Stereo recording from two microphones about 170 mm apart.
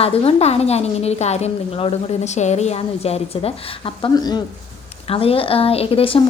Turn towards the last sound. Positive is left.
turn(degrees=30)  # may be behind; listen again after turning